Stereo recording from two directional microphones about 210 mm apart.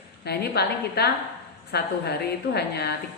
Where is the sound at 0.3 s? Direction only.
50° left (ahead or behind).